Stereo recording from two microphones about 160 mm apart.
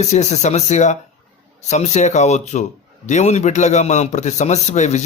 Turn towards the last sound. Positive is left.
turn(degrees=50)  # may be behind; listen again after turning